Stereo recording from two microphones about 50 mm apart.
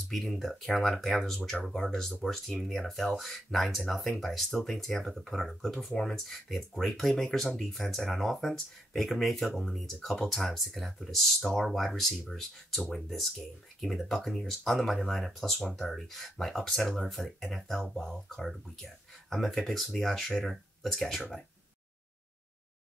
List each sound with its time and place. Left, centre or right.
0.1 s speech: centre